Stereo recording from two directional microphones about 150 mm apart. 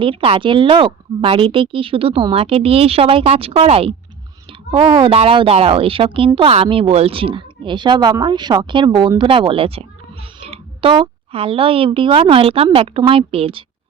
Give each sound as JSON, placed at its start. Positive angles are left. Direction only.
{"t": 0.0, "sound": "a woman's voice", "side_deg": -35}